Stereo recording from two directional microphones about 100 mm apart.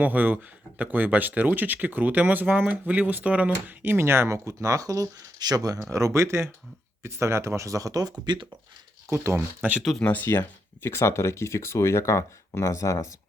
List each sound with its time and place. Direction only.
0.0 s speech: 15° right (ahead or behind); by 8.4 s 45° right (ahead or behind)
9.0 s speech: 25° right (ahead or behind)
10.0 s speech: 15° left (ahead or behind)